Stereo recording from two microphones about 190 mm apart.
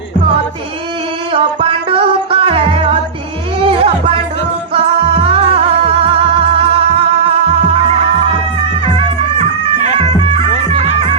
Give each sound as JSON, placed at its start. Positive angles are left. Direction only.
{"t": 1.3, "sound": "music", "side_deg": -30}
{"t": 3.6, "sound": "a sound", "side_deg": -25}
{"t": 4.7, "sound": "music", "side_deg": -30}
{"t": 10.0, "sound": "music", "side_deg": -30}